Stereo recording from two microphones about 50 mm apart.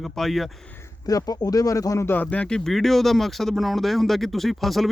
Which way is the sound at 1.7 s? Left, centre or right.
Left.